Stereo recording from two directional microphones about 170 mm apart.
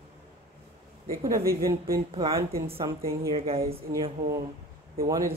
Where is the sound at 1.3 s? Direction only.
15° right (ahead or behind).